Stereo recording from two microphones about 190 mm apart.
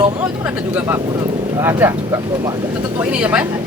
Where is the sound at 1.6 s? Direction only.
10° right (ahead or behind).